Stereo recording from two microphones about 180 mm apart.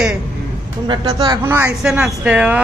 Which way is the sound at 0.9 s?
25° right (ahead or behind).